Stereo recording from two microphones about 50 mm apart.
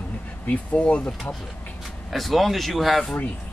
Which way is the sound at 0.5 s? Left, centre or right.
Left.